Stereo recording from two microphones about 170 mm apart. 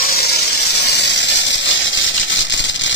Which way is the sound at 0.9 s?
85° left.